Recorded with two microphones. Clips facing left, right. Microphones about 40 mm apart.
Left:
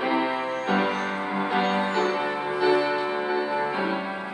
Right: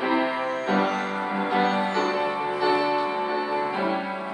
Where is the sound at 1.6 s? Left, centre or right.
Left.